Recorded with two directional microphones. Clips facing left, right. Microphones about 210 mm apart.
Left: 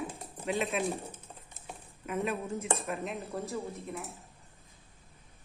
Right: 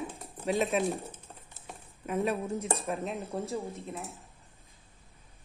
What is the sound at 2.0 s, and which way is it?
Speech, 35° right (ahead or behind).